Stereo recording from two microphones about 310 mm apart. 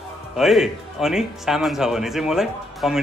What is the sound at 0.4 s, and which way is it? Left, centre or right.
Speech, centre.